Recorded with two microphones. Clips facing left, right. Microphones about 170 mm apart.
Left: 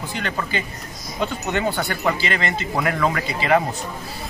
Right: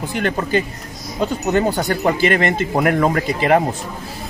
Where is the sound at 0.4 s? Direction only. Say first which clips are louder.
Right 7 dB; 40° right (ahead or behind).